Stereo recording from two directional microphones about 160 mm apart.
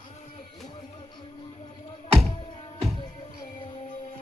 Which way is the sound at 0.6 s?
30° left (ahead or behind).